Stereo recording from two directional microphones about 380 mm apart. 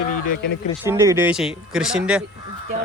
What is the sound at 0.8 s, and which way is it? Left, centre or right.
Speech, centre.